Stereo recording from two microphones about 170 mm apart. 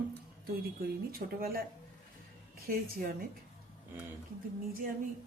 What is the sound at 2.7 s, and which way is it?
Speech, 55° right (ahead or behind).